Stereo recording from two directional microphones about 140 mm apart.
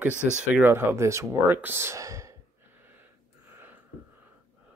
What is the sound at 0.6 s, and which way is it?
Speech, 15° right (ahead or behind).